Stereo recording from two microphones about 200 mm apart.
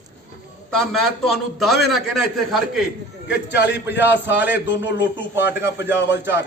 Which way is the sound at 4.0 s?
10° right (ahead or behind).